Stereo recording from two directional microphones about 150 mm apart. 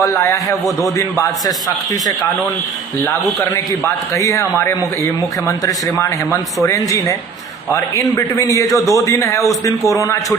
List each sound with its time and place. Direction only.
0.0 s a man's voice: 20° left (ahead or behind)
3.4 s a man's voice: 20° left (ahead or behind)